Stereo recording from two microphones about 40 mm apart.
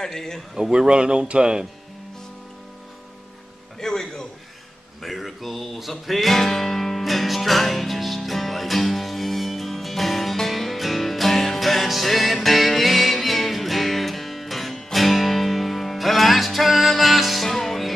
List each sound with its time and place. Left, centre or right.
0.0 s a man's voice: centre
0.6 s speech: centre
3.8 s music: centre
5.0 s music: centre